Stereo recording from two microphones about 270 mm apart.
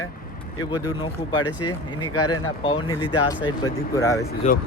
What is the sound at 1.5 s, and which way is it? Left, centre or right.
Speech, left.